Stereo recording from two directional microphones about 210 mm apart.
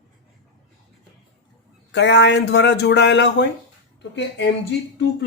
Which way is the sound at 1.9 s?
55° left (ahead or behind).